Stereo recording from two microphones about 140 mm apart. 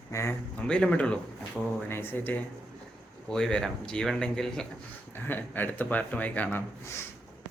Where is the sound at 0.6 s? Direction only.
5° left (ahead or behind).